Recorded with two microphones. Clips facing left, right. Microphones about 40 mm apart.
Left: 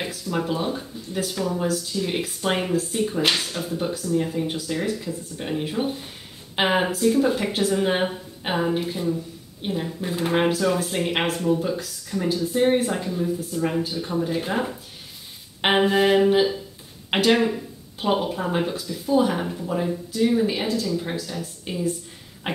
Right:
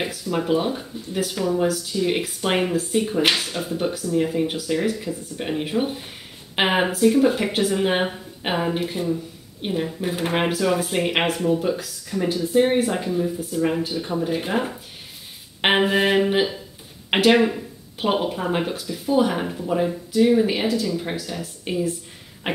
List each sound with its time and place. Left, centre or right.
0.0 s speech: centre